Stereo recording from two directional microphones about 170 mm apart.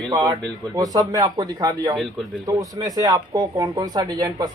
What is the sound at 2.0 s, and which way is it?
Speech, centre (ahead or behind).